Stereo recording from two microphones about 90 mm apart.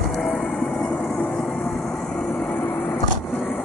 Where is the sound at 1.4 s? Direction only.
5° left (ahead or behind).